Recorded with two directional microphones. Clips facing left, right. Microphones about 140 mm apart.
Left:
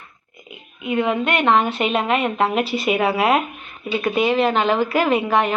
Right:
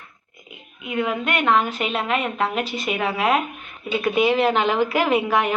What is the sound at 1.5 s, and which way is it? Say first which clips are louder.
Speech: left 2 dB; 25° left (ahead or behind).